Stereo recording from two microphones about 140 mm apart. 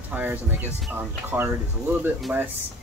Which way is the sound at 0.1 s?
15° right (ahead or behind).